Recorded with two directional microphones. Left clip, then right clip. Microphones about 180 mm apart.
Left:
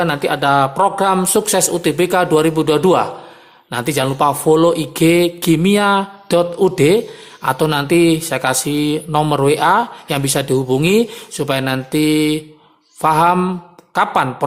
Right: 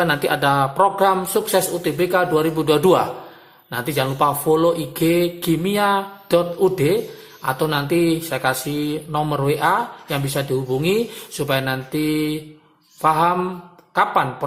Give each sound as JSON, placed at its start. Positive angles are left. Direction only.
{"t": 0.0, "sound": "speech", "side_deg": 20}